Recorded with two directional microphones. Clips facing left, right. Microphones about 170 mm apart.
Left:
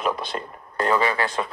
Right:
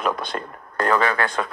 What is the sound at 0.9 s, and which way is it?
Speech, 55° right (ahead or behind).